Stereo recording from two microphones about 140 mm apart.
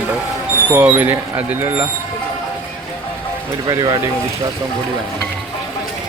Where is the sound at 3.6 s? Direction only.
30° right (ahead or behind).